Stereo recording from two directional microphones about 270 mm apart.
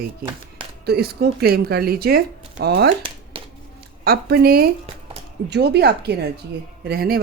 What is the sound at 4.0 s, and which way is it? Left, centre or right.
Speech, right.